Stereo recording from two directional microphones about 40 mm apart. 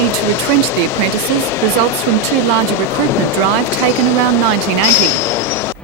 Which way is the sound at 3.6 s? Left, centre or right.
Left.